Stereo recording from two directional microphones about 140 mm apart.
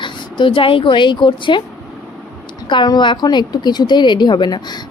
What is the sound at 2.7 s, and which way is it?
A woman's voice, 30° left (ahead or behind).